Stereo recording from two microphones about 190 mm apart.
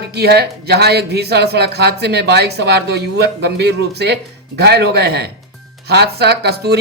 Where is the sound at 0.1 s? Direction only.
60° right (ahead or behind).